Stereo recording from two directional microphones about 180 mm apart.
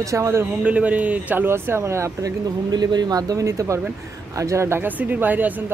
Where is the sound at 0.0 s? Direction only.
15° right (ahead or behind).